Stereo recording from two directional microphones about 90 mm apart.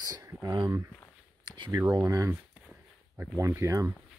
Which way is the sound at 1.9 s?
40° right (ahead or behind).